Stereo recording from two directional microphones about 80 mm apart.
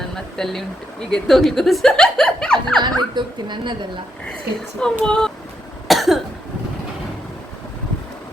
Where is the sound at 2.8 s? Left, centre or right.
Right.